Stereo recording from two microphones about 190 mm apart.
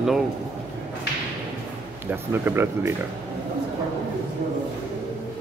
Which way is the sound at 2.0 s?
10° right (ahead or behind).